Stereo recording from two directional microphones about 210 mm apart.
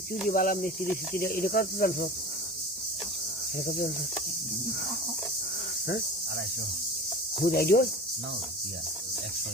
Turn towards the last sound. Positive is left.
turn(degrees=50)  # may be behind; listen again after turning